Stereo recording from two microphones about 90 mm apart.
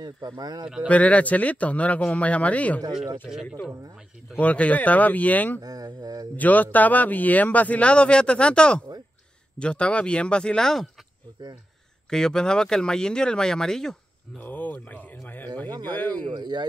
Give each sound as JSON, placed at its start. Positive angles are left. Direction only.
{"t": 0.4, "sound": "speech", "side_deg": -50}
{"t": 0.8, "sound": "speech", "side_deg": 15}
{"t": 4.4, "sound": "speech", "side_deg": 15}
{"t": 5.6, "sound": "speech", "side_deg": -45}
{"t": 6.3, "sound": "speech", "side_deg": 20}
{"t": 12.1, "sound": "speech", "side_deg": 5}
{"t": 14.4, "sound": "speech", "side_deg": 20}
{"t": 16.3, "sound": "speech", "side_deg": -55}